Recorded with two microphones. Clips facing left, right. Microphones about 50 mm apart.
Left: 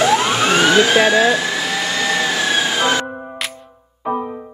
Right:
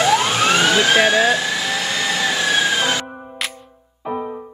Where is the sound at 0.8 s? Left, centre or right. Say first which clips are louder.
Left 1 dB; left.